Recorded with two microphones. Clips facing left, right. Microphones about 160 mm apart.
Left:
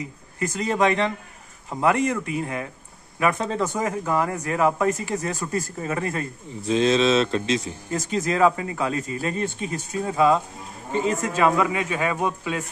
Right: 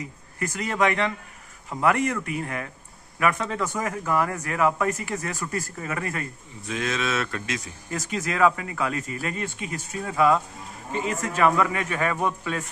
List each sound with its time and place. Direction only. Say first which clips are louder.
0.3 s a man's voice: left 3 dB; 20° left (ahead or behind)